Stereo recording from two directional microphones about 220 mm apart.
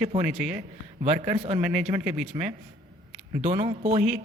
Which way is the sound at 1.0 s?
30° right (ahead or behind).